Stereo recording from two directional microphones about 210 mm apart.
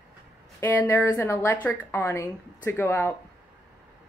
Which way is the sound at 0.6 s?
10° left (ahead or behind).